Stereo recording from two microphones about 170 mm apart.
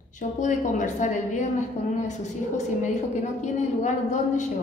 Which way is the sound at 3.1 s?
45° left (ahead or behind).